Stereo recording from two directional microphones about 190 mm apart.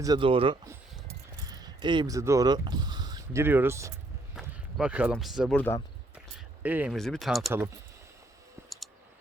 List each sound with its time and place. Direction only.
0.0 s speech: 25° right (ahead or behind)
4.4 s a sound: 5° right (ahead or behind)
5.1 s speech: centre (ahead or behind)
6.6 s speech: 10° right (ahead or behind)